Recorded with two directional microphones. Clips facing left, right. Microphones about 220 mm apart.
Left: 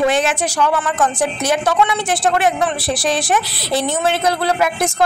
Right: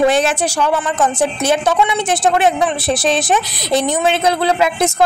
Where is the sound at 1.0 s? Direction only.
20° right (ahead or behind).